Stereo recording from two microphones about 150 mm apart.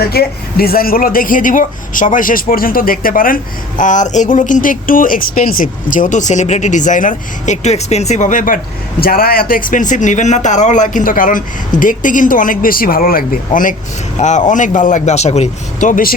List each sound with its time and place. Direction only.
0.1 s a man's voice: 90° left; by 8.5 s 60° left (ahead or behind)
9.0 s a man's voice: 85° left; by 16.1 s 65° left (ahead or behind)